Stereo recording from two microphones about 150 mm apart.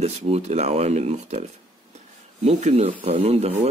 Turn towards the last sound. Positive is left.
turn(degrees=-45)  # may be behind; listen again after turning